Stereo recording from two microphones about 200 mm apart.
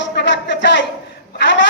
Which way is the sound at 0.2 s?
60° left (ahead or behind).